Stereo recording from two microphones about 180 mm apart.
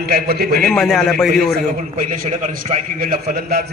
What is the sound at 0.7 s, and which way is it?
Speech, centre (ahead or behind).